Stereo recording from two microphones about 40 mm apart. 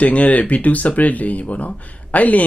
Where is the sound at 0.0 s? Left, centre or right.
Left.